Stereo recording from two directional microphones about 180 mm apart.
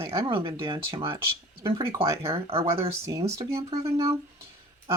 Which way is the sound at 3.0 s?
15° right (ahead or behind).